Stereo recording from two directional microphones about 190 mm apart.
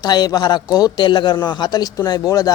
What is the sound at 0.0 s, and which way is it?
A man's voice, 20° left (ahead or behind).